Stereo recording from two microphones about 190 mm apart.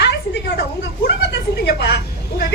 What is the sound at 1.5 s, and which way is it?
Speech, 60° left (ahead or behind).